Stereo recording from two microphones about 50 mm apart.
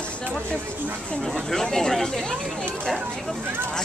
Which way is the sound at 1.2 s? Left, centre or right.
Centre.